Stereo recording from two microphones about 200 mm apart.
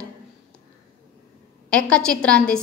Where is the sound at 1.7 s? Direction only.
5° left (ahead or behind).